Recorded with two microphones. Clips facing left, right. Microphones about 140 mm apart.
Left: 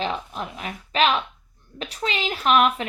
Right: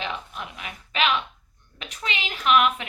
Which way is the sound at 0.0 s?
35° left (ahead or behind).